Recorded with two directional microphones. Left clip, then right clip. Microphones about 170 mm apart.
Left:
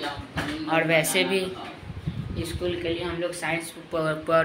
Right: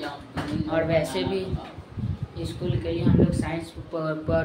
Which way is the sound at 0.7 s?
5° left (ahead or behind).